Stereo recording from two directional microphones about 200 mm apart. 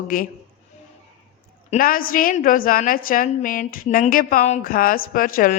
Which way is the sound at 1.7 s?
45° left (ahead or behind).